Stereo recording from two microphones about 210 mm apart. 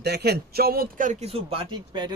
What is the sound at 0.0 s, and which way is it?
Speech, 50° right (ahead or behind).